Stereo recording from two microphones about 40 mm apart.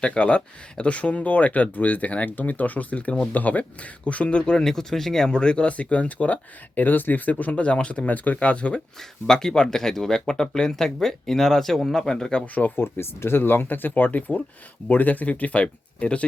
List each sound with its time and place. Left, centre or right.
0.0 s speech: left
4.6 s speech: centre; by 8.0 s left
8.0 s speech: left
9.0 s speech: centre
11.9 s speech: centre
12.7 s speech: left